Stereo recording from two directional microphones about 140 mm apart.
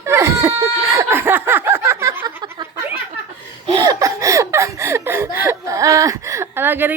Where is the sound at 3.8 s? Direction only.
25° right (ahead or behind).